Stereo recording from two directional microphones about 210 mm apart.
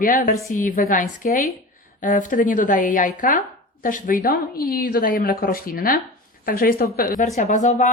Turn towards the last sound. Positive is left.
turn(degrees=35)  # may be behind; listen again after turning